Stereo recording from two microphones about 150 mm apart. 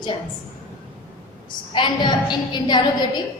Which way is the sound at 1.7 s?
30° left (ahead or behind).